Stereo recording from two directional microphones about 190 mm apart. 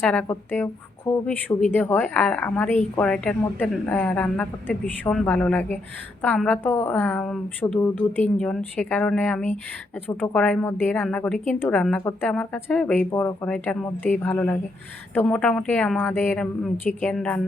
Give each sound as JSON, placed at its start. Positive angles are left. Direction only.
{"t": 0.0, "sound": "a woman's voice", "side_deg": 10}
{"t": 10.3, "sound": "a woman's voice", "side_deg": 5}